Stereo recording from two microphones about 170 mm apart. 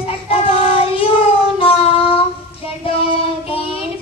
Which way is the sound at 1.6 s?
35° left (ahead or behind).